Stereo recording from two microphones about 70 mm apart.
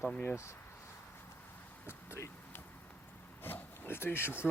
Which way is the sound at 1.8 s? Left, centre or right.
Left.